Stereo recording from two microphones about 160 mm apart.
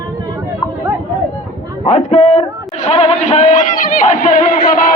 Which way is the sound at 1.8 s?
40° left (ahead or behind).